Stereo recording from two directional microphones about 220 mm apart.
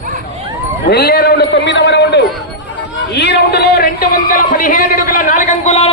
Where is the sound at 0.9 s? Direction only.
45° left (ahead or behind).